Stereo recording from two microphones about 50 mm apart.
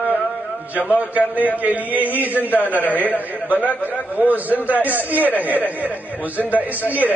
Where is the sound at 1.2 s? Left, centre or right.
Left.